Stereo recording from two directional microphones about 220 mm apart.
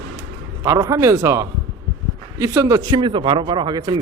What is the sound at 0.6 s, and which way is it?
Speech, 15° right (ahead or behind).